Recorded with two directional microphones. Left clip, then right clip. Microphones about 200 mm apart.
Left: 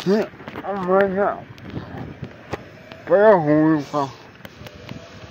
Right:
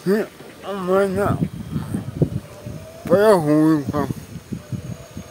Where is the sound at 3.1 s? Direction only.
70° right (ahead or behind).